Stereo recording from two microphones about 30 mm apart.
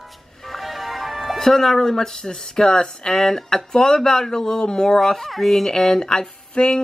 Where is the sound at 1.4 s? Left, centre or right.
Centre.